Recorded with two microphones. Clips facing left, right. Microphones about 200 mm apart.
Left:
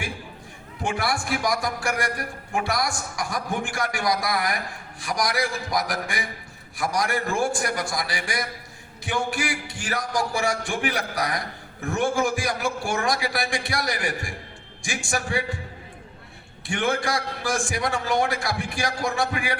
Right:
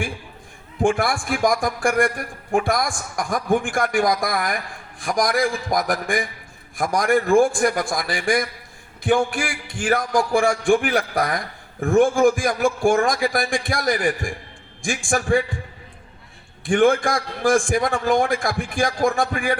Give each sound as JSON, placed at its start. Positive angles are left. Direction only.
{"t": 0.8, "sound": "a man's voice", "side_deg": -50}
{"t": 16.6, "sound": "a man's voice", "side_deg": -50}